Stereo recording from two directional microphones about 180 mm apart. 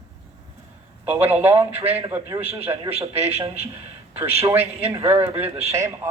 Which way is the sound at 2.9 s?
35° right (ahead or behind).